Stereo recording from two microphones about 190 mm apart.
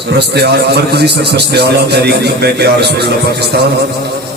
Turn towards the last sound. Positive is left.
turn(degrees=-60)  # may be behind; listen again after turning